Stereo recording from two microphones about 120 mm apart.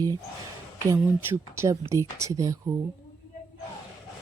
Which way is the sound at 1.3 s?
25° right (ahead or behind).